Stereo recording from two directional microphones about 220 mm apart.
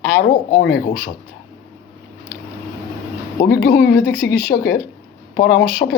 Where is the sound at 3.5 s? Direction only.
45° left (ahead or behind).